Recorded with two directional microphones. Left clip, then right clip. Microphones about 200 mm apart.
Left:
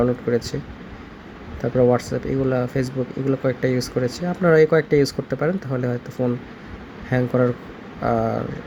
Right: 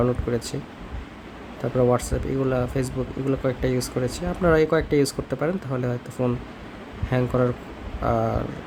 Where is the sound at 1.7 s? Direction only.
5° right (ahead or behind).